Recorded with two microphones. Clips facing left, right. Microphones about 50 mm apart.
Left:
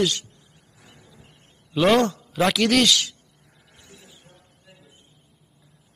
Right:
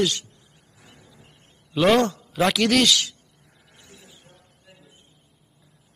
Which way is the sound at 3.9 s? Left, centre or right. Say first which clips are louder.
Even; left.